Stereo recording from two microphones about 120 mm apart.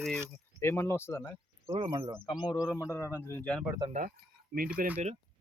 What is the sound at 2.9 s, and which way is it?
Speech, 20° left (ahead or behind).